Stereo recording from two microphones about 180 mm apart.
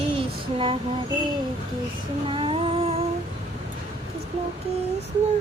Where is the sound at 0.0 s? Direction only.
30° right (ahead or behind).